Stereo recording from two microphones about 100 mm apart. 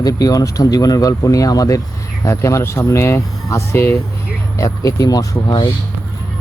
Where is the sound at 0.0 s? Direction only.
40° left (ahead or behind).